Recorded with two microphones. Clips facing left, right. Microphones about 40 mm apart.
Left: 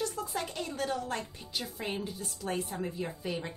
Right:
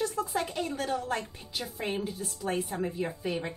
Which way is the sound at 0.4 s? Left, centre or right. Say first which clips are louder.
Right 1 dB; right.